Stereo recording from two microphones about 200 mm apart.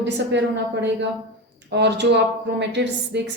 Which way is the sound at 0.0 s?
60° right (ahead or behind).